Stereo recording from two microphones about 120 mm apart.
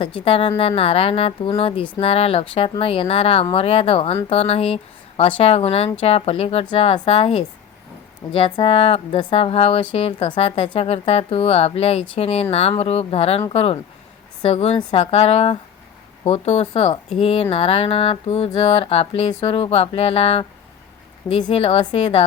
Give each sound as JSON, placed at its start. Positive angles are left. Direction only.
{"t": 0.0, "sound": "a woman's voice", "side_deg": 50}
{"t": 21.5, "sound": "a woman's voice", "side_deg": 55}